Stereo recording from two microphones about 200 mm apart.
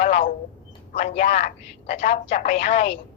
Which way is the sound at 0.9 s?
35° left (ahead or behind).